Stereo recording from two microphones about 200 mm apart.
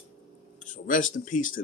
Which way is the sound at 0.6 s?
40° left (ahead or behind).